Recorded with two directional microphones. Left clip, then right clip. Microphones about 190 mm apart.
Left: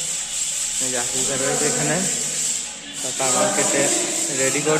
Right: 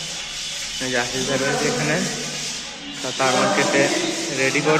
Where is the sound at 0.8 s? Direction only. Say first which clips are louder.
Right 4 dB; centre (ahead or behind).